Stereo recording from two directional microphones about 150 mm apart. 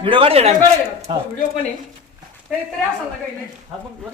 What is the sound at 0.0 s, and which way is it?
Speech, 35° right (ahead or behind).